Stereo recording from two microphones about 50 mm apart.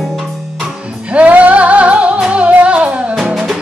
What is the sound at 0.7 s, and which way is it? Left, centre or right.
Music, right.